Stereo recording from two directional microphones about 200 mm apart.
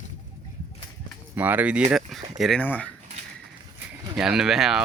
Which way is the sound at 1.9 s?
Centre (ahead or behind).